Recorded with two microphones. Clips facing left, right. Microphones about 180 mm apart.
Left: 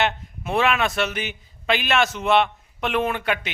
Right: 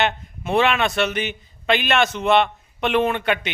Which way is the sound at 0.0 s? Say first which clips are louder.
Right 1 dB; centre (ahead or behind).